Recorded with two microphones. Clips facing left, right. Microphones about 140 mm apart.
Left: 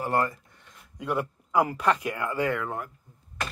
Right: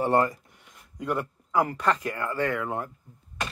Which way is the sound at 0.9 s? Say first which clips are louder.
Even; 5° left (ahead or behind).